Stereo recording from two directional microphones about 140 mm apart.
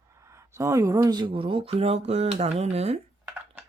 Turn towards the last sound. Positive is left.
turn(degrees=-50)  # may be behind; listen again after turning